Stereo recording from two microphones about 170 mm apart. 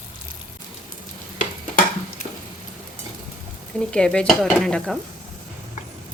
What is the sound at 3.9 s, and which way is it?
A woman's voice, 5° left (ahead or behind).